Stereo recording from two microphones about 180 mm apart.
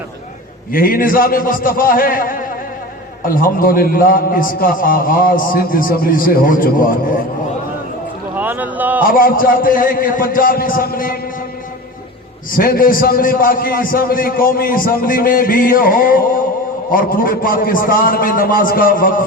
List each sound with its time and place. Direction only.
0.7 s a man's voice: 50° left (ahead or behind)
8.4 s speech: 10° right (ahead or behind)
9.0 s a man's voice: 50° left (ahead or behind)
12.5 s a man's voice: 50° left (ahead or behind)